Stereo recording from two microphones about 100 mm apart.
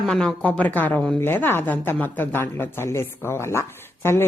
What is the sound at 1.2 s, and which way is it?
Speech, 20° left (ahead or behind).